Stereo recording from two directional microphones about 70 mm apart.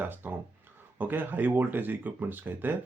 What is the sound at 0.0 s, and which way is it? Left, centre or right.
Speech, right.